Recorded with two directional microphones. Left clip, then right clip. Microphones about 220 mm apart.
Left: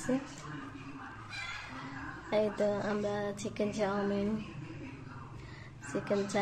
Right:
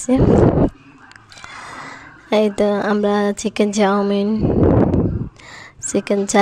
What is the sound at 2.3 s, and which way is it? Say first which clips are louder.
Speech: right 15 dB; 45° right (ahead or behind).